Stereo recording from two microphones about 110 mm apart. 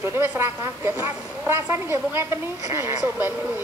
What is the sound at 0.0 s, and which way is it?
A woman's voice, 25° right (ahead or behind).